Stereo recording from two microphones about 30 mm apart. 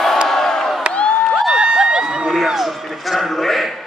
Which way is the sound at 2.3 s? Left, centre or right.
Centre.